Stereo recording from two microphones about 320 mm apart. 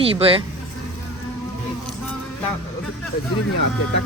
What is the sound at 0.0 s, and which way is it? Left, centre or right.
Speech, centre.